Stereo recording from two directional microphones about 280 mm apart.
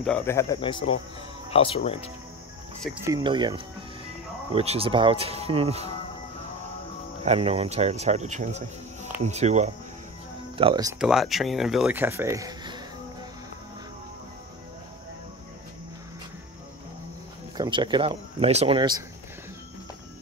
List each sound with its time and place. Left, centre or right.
0.0 s speech: centre
2.8 s speech: centre
3.2 s speech: centre
7.2 s speech: right
17.6 s speech: centre